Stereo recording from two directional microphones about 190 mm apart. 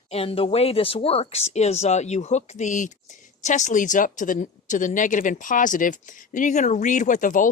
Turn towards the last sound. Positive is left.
turn(degrees=45)  # may be behind; listen again after turning